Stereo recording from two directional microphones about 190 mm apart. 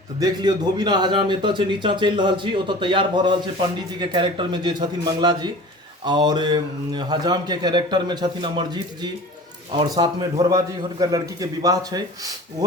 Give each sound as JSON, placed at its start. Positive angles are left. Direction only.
{"t": 0.2, "sound": "speech", "side_deg": -20}